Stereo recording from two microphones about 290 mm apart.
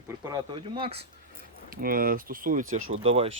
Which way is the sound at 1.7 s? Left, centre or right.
Right.